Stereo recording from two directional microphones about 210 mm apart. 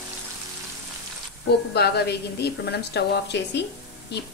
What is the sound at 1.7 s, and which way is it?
A woman's voice, 50° left (ahead or behind).